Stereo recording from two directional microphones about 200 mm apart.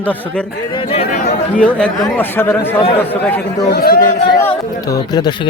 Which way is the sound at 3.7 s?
50° left (ahead or behind).